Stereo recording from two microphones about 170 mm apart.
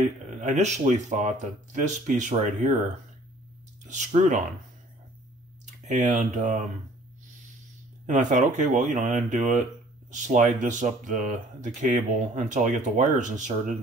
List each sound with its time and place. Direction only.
0.4 s speech: 45° right (ahead or behind)
3.8 s speech: 45° right (ahead or behind)
5.9 s speech: 45° right (ahead or behind)
8.1 s speech: 45° right (ahead or behind)